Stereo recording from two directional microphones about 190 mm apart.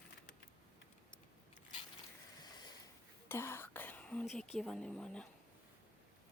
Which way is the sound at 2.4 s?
20° left (ahead or behind).